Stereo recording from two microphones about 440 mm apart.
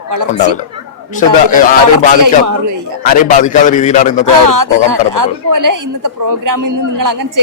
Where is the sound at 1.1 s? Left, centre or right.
Centre.